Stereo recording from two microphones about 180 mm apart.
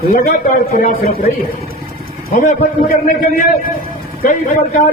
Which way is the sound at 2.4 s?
50° left (ahead or behind).